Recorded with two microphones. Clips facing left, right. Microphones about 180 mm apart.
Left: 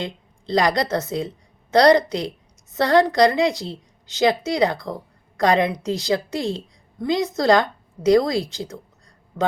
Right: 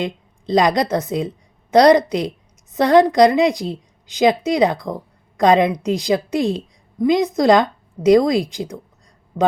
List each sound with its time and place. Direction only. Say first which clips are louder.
0.0 s a woman's voice: right 6 dB; 20° right (ahead or behind)